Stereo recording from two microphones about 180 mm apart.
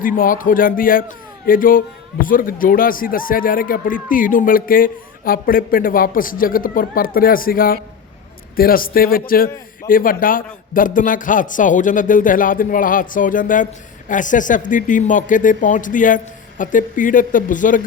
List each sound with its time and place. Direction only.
0.0 s a man's voice: 50° left (ahead or behind)